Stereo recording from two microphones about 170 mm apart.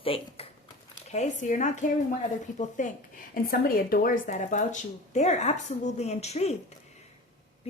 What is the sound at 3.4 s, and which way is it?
Speech, 60° left (ahead or behind).